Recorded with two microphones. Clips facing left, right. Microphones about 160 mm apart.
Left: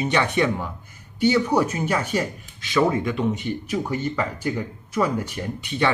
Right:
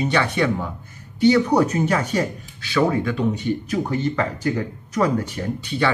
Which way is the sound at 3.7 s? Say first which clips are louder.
Even; 10° left (ahead or behind).